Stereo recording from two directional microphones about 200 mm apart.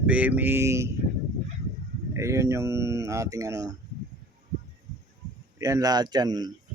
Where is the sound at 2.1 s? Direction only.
15° right (ahead or behind).